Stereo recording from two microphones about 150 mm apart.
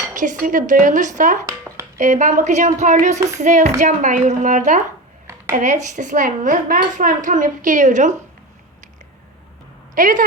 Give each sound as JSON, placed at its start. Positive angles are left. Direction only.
{"t": 0.1, "sound": "a woman's voice", "side_deg": -55}
{"t": 1.5, "sound": "a sound", "side_deg": -20}
{"t": 2.0, "sound": "a woman's voice", "side_deg": -55}
{"t": 9.9, "sound": "speech", "side_deg": -60}